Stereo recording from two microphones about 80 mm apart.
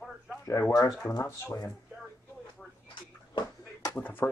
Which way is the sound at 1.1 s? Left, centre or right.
Left.